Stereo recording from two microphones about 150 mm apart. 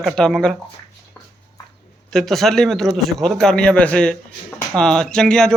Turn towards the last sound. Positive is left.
turn(degrees=5)  # may be behind; listen again after turning